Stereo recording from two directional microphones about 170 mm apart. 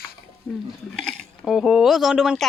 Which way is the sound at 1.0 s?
5° left (ahead or behind).